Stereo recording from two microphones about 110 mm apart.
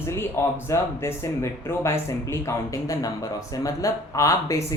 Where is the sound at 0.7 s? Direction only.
25° left (ahead or behind).